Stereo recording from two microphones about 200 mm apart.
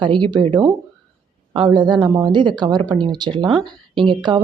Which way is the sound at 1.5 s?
25° right (ahead or behind).